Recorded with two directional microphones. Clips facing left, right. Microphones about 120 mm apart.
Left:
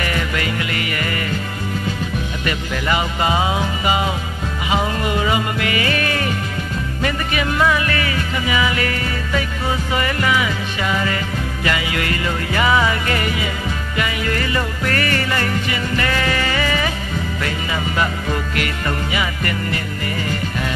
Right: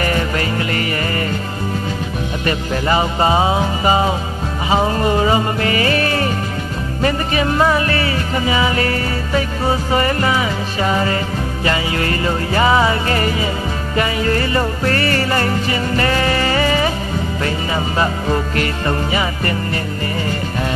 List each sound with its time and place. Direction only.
0.0 s music: 35° right (ahead or behind)
2.4 s music: 35° right (ahead or behind)